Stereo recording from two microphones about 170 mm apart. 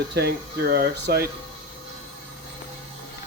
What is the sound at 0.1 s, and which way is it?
Speech, 70° right (ahead or behind).